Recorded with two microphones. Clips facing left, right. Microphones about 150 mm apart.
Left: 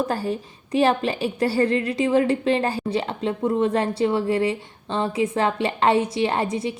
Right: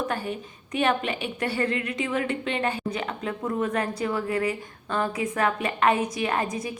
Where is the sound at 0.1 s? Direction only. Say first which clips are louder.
Left 5 dB; 35° left (ahead or behind).